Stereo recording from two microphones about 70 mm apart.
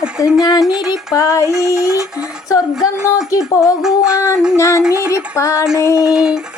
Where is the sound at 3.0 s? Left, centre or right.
Left.